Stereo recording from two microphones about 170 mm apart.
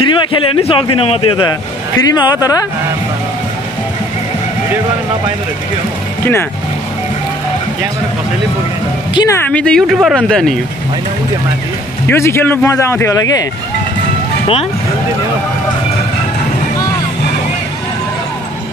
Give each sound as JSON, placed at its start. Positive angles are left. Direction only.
{"t": 0.0, "sound": "a man's voice", "side_deg": 30}
{"t": 9.1, "sound": "speech", "side_deg": 25}
{"t": 9.5, "sound": "speech", "side_deg": 5}
{"t": 12.1, "sound": "speech", "side_deg": 15}